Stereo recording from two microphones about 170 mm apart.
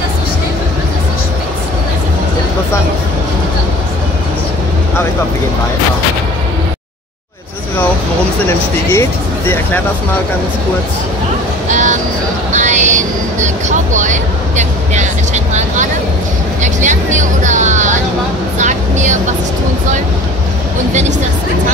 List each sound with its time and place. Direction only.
8.5 s speech: 15° left (ahead or behind)
11.7 s a sound: 45° right (ahead or behind)
12.5 s vehicle: 45° right (ahead or behind)
16.6 s music: 45° right (ahead or behind)
18.6 s vehicle: 45° right (ahead or behind)